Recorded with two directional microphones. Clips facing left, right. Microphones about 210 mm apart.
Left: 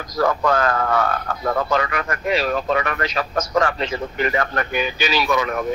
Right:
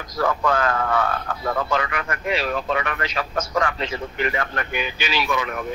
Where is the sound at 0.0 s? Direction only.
40° left (ahead or behind).